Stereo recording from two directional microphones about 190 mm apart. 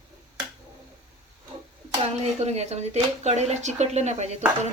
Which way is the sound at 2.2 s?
35° right (ahead or behind).